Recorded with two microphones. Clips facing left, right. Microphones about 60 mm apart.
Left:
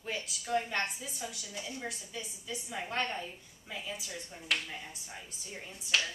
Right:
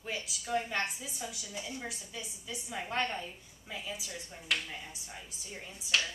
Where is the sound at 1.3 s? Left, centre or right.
Centre.